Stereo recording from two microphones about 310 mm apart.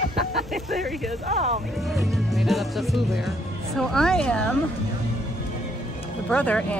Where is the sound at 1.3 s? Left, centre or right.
Right.